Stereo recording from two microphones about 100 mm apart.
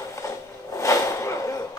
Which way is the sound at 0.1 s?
30° left (ahead or behind).